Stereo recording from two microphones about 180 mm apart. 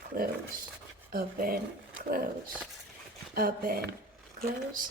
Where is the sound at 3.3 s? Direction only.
55° right (ahead or behind).